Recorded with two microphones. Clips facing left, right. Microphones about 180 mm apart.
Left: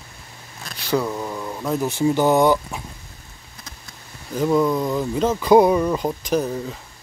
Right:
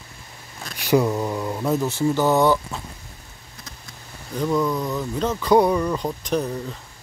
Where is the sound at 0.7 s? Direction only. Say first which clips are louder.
Right 3 dB; 15° right (ahead or behind).